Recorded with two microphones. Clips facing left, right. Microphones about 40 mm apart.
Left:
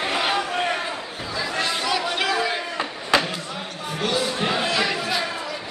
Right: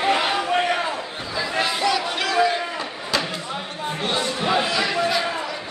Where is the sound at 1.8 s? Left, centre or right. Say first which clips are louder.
Right 1 dB; centre.